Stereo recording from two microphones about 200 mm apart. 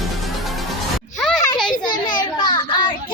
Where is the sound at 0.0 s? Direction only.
Centre (ahead or behind).